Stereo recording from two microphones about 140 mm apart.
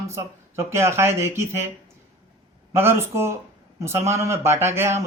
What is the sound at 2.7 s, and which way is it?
Speech, 15° right (ahead or behind).